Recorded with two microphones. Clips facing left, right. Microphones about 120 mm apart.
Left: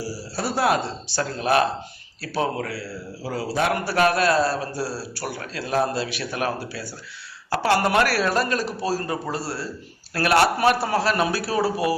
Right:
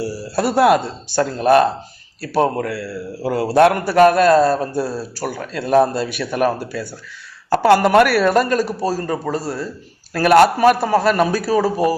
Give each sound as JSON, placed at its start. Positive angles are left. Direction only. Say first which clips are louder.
{"t": 0.0, "sound": "a man's voice", "louder": "right 8 dB", "side_deg": -60}